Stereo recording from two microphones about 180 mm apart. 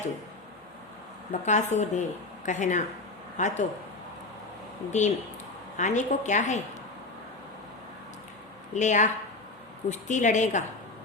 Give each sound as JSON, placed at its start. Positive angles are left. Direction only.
{"t": 1.3, "sound": "speech", "side_deg": 40}
{"t": 4.9, "sound": "a woman's voice", "side_deg": 40}
{"t": 8.7, "sound": "a woman's voice", "side_deg": 40}